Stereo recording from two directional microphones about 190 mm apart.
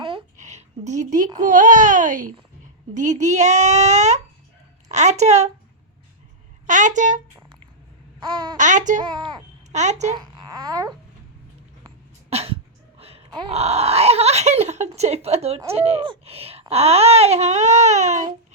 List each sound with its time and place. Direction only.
0.0 s a sound: 25° right (ahead or behind)
0.3 s a sound: 40° right (ahead or behind)
1.5 s a child's voice: 40° right (ahead or behind)
6.7 s speech: 40° right (ahead or behind)
8.2 s speech: 25° right (ahead or behind)
8.5 s speech: 40° right (ahead or behind)
9.0 s speech: 25° right (ahead or behind)
9.7 s speech: 35° right (ahead or behind)
10.2 s babbling: 20° right (ahead or behind)
12.3 s a sound: 35° right (ahead or behind)
13.0 s speech: 30° right (ahead or behind)